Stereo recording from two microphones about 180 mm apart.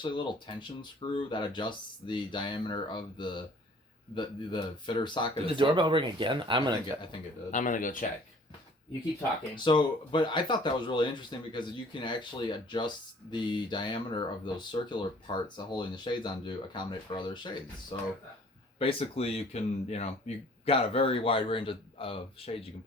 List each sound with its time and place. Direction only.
0.0 s speech: 25° left (ahead or behind)
5.5 s speech: 25° right (ahead or behind)
7.5 s speech: 45° left (ahead or behind)
9.6 s speech: 25° left (ahead or behind)